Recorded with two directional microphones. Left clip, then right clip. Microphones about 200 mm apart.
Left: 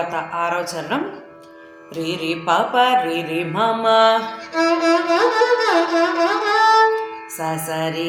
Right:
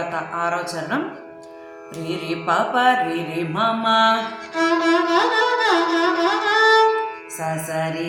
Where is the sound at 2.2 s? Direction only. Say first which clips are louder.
Left 2 dB; 35° left (ahead or behind).